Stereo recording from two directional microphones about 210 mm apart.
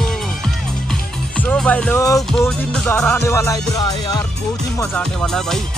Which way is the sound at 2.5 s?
5° left (ahead or behind).